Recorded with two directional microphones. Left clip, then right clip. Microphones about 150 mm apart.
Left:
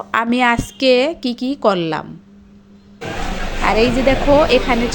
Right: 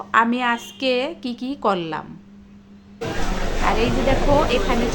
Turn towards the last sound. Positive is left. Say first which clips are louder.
# left 6 dB
turn(degrees=35)  # may be behind; listen again after turning